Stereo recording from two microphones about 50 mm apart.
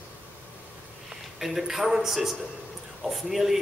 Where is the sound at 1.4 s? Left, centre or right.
Centre.